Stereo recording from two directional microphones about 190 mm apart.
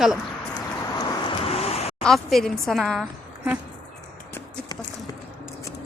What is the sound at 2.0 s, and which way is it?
Speech, centre (ahead or behind).